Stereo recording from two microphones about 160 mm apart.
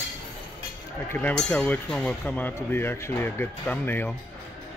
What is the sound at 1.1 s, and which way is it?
Speech, 5° left (ahead or behind).